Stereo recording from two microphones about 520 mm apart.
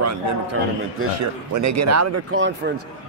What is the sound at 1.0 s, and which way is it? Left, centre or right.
Speech, right.